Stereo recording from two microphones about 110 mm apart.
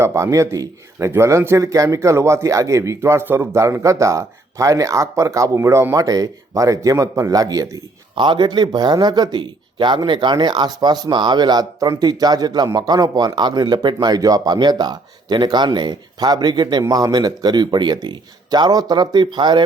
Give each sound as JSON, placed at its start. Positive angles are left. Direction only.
{"t": 0.0, "sound": "speech", "side_deg": -25}
{"t": 8.1, "sound": "speech", "side_deg": -45}